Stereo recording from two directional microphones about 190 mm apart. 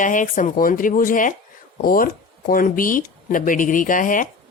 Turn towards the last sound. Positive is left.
turn(degrees=45)  # may be behind; listen again after turning